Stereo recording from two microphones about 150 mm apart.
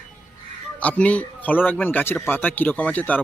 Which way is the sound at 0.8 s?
10° left (ahead or behind).